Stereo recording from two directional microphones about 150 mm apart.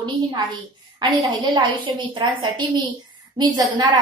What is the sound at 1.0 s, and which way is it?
A woman's voice, 30° right (ahead or behind).